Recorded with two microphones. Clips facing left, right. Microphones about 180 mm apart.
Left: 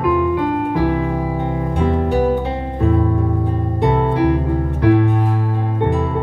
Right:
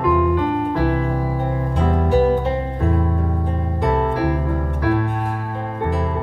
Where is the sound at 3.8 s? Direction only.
20° left (ahead or behind).